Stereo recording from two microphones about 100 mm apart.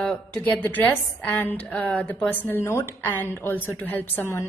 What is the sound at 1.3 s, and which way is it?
A woman's voice, 20° left (ahead or behind).